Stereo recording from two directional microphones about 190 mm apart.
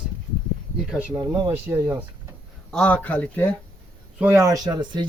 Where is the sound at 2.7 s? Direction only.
5° left (ahead or behind).